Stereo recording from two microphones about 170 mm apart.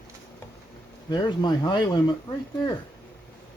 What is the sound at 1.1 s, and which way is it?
Speech, 25° left (ahead or behind).